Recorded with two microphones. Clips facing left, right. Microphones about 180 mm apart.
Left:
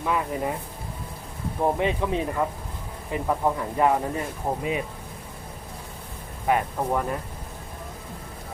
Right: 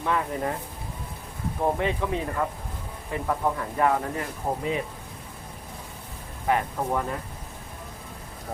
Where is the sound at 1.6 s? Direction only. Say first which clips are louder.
Left 2 dB; 15° left (ahead or behind).